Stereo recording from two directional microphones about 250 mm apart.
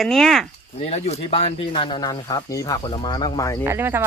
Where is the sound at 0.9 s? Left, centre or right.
Left.